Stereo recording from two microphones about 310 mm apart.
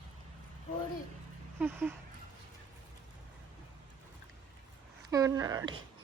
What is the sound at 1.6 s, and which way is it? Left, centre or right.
Speech, centre.